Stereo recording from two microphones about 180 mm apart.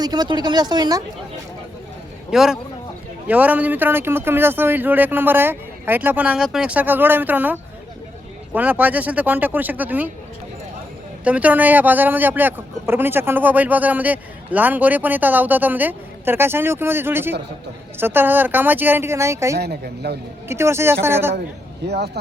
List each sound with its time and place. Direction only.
0.0 s speech: 25° right (ahead or behind)
2.3 s speech: centre (ahead or behind)
11.2 s speech: 10° right (ahead or behind)
19.5 s speech: 60° right (ahead or behind)
20.5 s speech: 15° right (ahead or behind)
21.8 s speech: 65° right (ahead or behind)